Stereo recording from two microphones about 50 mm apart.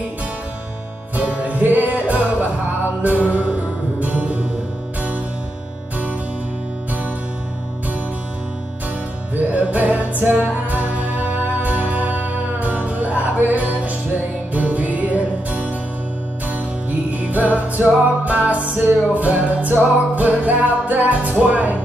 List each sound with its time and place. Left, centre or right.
1.1 s music: right
9.3 s music: right
17.1 s music: right
21.4 s speech: right